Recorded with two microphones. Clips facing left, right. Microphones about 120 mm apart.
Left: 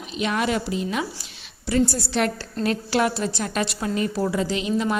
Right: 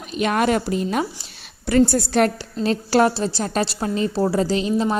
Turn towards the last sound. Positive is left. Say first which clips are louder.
# right 3 dB
turn(degrees=-35)  # may be behind; listen again after turning